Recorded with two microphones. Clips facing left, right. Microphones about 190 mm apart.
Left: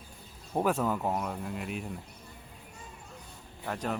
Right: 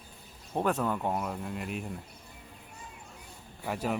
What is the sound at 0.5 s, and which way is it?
Speech, 5° left (ahead or behind).